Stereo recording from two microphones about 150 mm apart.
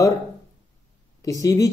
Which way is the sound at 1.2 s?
20° left (ahead or behind).